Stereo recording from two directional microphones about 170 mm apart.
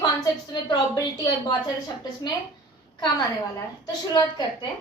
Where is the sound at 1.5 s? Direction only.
25° left (ahead or behind).